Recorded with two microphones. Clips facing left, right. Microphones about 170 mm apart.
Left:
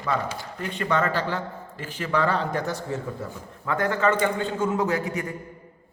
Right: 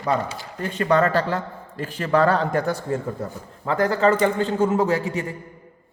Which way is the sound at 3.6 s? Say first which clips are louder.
Right 4 dB; 35° right (ahead or behind).